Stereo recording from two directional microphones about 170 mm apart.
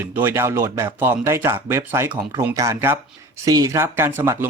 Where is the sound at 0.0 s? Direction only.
15° right (ahead or behind).